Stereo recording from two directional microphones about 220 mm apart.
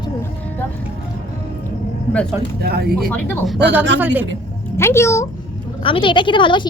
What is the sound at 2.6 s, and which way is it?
Speech, 45° right (ahead or behind).